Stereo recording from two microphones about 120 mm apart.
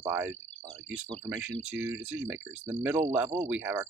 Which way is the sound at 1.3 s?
15° right (ahead or behind).